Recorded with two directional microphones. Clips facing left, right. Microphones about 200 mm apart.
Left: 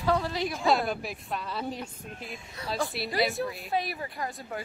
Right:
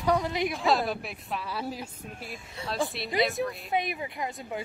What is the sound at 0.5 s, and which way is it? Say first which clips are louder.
Speech: left 2 dB; centre (ahead or behind).